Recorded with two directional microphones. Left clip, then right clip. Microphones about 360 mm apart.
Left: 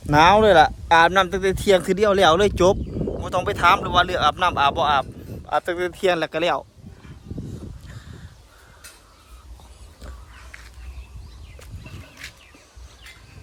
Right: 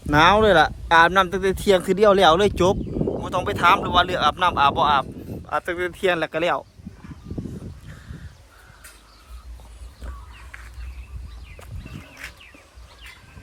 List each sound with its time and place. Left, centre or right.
0.1 s speech: centre